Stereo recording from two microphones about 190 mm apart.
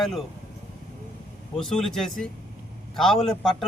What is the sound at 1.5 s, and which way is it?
A man's voice, centre (ahead or behind).